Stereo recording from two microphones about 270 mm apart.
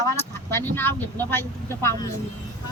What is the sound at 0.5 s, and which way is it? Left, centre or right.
Speech, centre.